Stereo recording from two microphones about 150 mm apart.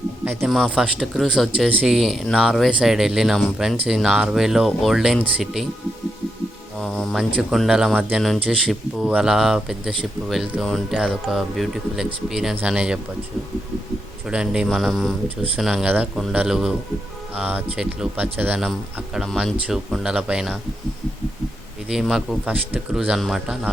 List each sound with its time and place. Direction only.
0.4 s speech: centre (ahead or behind)
6.7 s speech: centre (ahead or behind)
14.3 s speech: 5° right (ahead or behind)
21.8 s speech: centre (ahead or behind)